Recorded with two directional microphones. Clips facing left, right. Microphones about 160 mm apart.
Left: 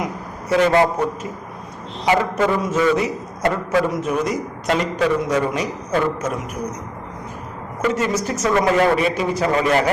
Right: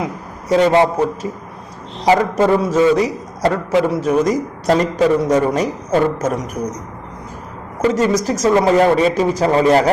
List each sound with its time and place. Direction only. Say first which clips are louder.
0.6 s a man's voice: right 3 dB; 25° right (ahead or behind)
7.8 s a man's voice: right 5 dB; 30° right (ahead or behind)